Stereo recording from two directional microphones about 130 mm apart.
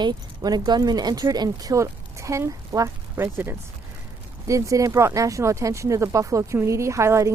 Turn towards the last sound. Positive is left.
turn(degrees=-20)  # may be behind; listen again after turning